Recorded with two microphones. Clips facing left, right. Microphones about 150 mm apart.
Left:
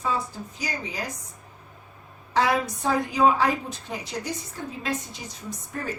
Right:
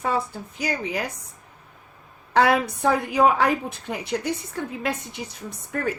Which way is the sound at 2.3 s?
65° right (ahead or behind).